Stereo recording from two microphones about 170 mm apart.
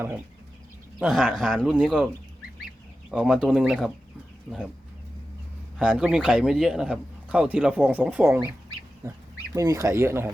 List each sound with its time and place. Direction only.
0.9 s speech: centre (ahead or behind)
3.1 s speech: centre (ahead or behind)
5.8 s speech: 5° right (ahead or behind)